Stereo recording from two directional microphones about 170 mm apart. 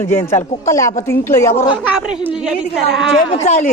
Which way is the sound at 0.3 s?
20° left (ahead or behind).